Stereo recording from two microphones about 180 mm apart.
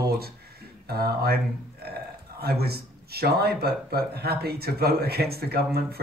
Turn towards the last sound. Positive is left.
turn(degrees=-60)  # may be behind; listen again after turning